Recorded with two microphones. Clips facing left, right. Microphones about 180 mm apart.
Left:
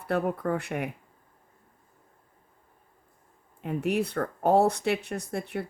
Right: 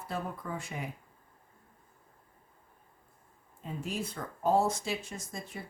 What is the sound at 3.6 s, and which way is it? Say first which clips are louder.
Speech: left 10 dB; 65° left (ahead or behind).